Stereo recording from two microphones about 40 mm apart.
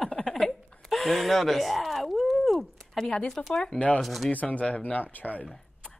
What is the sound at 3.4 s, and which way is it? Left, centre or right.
Speech, left.